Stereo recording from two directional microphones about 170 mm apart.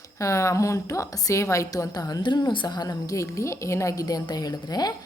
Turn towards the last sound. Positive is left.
turn(degrees=25)  # may be behind; listen again after turning